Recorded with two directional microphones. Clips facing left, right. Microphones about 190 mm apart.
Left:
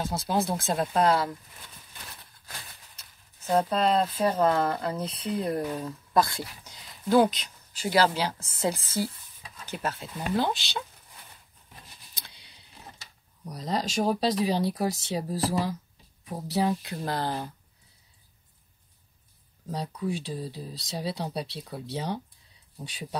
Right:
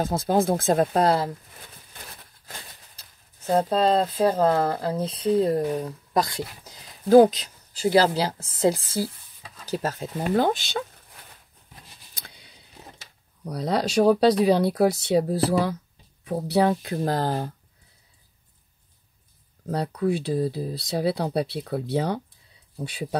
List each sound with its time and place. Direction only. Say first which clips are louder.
0.0 s speech: right 6 dB; 50° right (ahead or behind); by 1.3 s 35° right (ahead or behind)
3.5 s speech: right 3 dB; 30° right (ahead or behind)
5.7 s speech: right 5 dB; 15° right (ahead or behind)
7.8 s speech: right 4 dB; 30° right (ahead or behind); by 10.8 s 50° right (ahead or behind)
13.4 s speech: right 6 dB; 65° right (ahead or behind); by 17.6 s 40° right (ahead or behind)
19.7 s speech: right 7 dB; 65° right (ahead or behind)